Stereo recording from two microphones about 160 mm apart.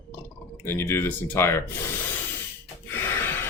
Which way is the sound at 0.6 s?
15° left (ahead or behind).